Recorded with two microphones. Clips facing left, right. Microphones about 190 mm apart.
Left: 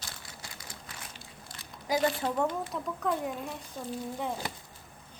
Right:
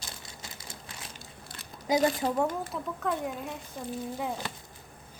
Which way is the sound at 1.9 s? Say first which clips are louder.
Right 4 dB; 20° right (ahead or behind).